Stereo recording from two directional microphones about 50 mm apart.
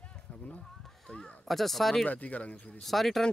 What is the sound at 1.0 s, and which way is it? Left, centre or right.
Speech, centre.